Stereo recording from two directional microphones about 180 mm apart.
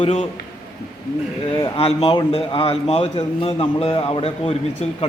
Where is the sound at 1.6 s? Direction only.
30° left (ahead or behind).